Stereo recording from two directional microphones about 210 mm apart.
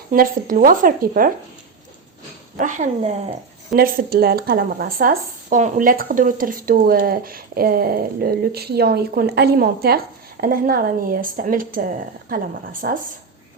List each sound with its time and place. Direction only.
0.1 s speech: 40° right (ahead or behind)
2.6 s speech: 35° right (ahead or behind)
3.8 s speech: 45° right (ahead or behind)